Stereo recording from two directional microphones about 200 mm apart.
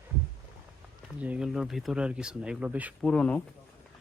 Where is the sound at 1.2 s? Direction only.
5° right (ahead or behind).